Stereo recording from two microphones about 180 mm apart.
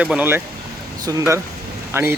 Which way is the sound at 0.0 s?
5° right (ahead or behind).